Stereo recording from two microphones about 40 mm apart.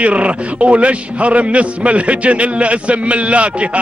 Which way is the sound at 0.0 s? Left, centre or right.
Right.